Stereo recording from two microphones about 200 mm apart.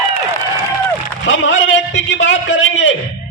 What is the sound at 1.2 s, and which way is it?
A man's voice, 65° left (ahead or behind).